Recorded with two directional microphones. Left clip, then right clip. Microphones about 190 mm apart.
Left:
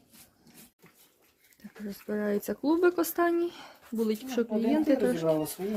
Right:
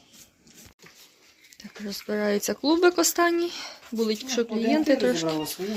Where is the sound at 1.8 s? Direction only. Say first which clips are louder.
Right 6 dB; centre (ahead or behind).